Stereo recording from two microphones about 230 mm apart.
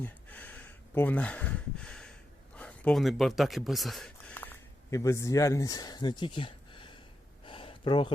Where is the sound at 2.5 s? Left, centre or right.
Centre; by 6.9 s left.